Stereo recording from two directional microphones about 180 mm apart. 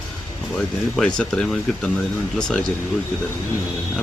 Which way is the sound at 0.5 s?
5° left (ahead or behind).